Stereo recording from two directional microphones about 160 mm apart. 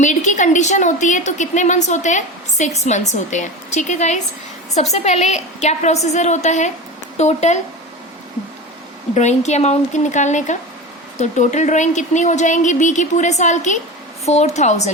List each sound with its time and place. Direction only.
0.0 s a woman's voice: 50° left (ahead or behind)
9.1 s a woman's voice: 45° left (ahead or behind)